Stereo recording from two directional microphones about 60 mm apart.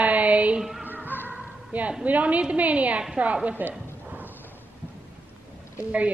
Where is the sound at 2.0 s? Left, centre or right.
Right.